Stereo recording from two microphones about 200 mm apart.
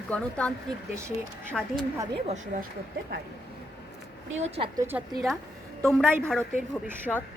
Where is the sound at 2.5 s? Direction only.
40° right (ahead or behind).